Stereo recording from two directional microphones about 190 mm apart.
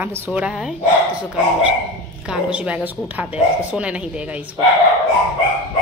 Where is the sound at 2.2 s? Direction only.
5° right (ahead or behind).